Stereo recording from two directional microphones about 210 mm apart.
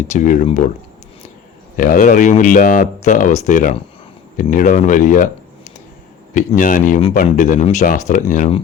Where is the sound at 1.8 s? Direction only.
40° left (ahead or behind).